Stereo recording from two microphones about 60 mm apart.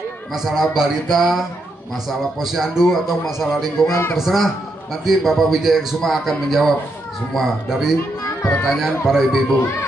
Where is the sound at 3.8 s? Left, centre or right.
Left.